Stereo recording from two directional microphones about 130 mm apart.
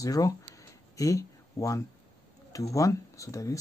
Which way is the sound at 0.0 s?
25° left (ahead or behind).